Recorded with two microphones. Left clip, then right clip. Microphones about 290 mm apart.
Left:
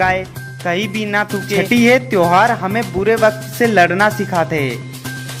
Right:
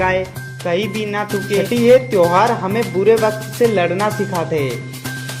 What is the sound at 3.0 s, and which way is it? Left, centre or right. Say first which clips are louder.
Speech: even; left.